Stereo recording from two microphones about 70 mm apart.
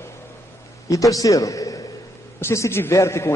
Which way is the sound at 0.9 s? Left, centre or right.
Left.